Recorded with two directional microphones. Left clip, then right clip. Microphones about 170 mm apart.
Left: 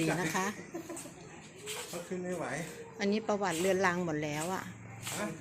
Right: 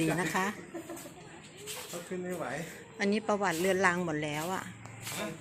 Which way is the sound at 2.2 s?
20° left (ahead or behind).